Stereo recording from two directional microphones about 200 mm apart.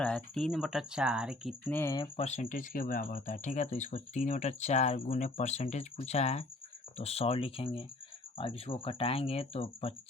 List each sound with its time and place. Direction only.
0.0 s speech: 5° left (ahead or behind)
1.7 s speech: 15° left (ahead or behind)
2.1 s speech: 35° left (ahead or behind)